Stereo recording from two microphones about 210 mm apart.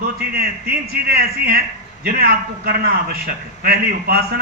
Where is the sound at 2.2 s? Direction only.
45° right (ahead or behind).